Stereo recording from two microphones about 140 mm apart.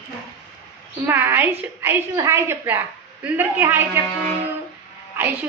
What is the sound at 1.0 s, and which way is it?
A woman's voice, 15° right (ahead or behind).